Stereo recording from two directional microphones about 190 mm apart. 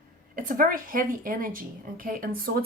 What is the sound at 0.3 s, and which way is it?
A woman's voice, 45° right (ahead or behind).